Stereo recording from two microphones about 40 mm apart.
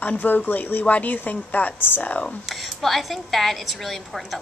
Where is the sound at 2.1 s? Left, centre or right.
Left.